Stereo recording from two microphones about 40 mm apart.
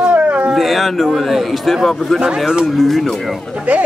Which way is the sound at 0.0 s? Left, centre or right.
Right.